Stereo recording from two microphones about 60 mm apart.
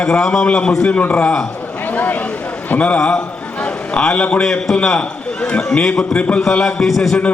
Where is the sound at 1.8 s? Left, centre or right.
Left.